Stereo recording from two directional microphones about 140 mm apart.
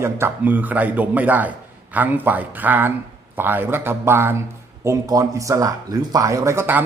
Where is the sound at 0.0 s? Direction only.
15° right (ahead or behind).